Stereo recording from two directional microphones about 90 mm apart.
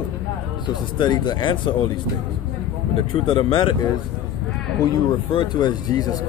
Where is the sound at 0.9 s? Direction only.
60° left (ahead or behind).